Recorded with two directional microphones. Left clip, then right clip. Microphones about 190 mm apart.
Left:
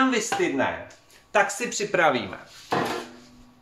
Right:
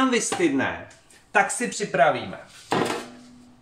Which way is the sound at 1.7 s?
40° left (ahead or behind).